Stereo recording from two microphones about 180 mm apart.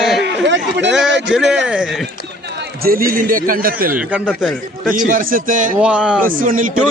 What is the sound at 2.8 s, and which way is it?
A man's voice, 55° right (ahead or behind).